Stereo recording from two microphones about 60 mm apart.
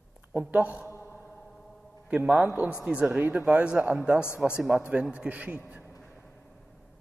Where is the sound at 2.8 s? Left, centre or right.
Centre.